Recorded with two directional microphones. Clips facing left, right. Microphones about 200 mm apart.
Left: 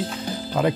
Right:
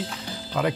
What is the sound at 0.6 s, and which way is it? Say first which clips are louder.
Speech: left 3 dB; 30° left (ahead or behind).